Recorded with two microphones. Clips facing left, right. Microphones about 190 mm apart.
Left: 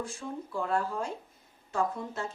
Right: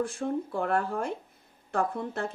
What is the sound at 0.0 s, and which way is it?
Speech, 60° right (ahead or behind).